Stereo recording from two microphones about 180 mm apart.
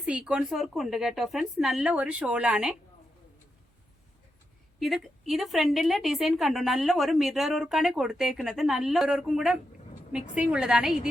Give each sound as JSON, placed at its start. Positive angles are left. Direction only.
{"t": 0.0, "sound": "a woman's voice", "side_deg": -5}
{"t": 4.8, "sound": "a woman's voice", "side_deg": 0}